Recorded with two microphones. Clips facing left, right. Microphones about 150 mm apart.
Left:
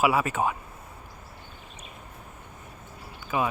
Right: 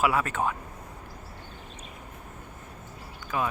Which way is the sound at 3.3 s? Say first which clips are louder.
Left 2 dB; 5° left (ahead or behind).